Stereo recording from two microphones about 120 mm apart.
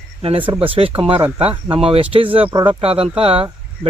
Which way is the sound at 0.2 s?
55° right (ahead or behind).